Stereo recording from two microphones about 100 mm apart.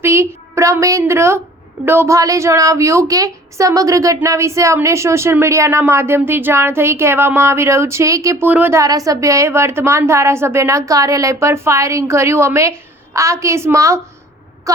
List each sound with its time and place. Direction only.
0.0 s a woman's voice: 25° right (ahead or behind)
8.4 s speech: 15° right (ahead or behind)
8.7 s a woman's voice: 35° right (ahead or behind)